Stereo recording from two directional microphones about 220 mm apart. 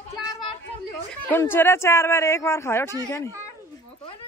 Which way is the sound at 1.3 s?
10° left (ahead or behind).